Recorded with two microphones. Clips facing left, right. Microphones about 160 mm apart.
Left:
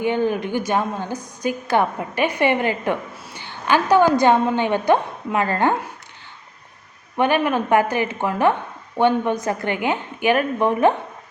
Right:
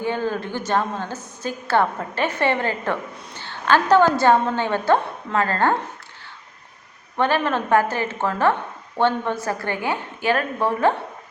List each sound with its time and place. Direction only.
0.0 s a woman's voice: 20° left (ahead or behind)
7.2 s a woman's voice: 15° left (ahead or behind)